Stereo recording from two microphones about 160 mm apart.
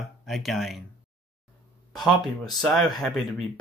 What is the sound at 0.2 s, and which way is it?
Speech, centre (ahead or behind).